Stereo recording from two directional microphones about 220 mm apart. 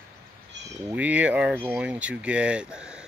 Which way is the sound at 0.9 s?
5° right (ahead or behind).